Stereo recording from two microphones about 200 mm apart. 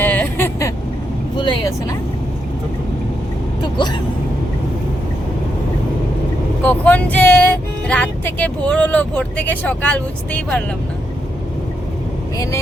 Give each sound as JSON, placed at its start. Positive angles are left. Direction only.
{"t": 0.0, "sound": "vehicle", "side_deg": 10}
{"t": 1.4, "sound": "speech", "side_deg": 25}
{"t": 3.6, "sound": "speech", "side_deg": 25}
{"t": 6.7, "sound": "speech", "side_deg": 10}